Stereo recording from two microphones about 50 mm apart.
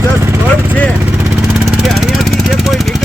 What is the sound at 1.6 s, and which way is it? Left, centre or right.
Vehicle, centre.